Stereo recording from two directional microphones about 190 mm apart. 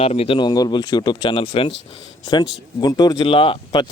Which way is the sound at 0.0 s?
30° left (ahead or behind).